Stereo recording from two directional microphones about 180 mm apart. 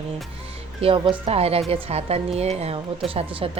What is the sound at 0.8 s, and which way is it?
Speech, 30° right (ahead or behind).